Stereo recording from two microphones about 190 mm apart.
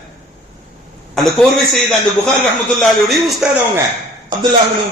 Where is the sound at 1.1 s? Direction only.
Centre (ahead or behind).